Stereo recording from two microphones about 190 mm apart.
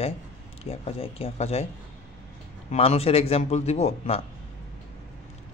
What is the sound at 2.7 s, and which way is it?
Speech, 30° left (ahead or behind).